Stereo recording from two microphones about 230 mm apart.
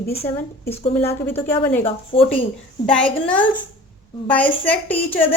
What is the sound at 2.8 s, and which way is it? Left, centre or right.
A woman's voice, centre.